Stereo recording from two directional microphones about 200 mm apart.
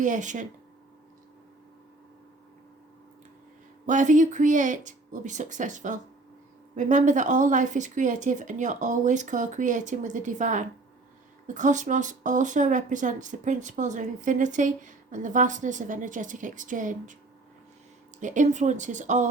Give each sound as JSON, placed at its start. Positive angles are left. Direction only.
{"t": 0.0, "sound": "a woman's voice", "side_deg": -40}
{"t": 3.8, "sound": "a woman's voice", "side_deg": -40}
{"t": 18.2, "sound": "a woman's voice", "side_deg": -40}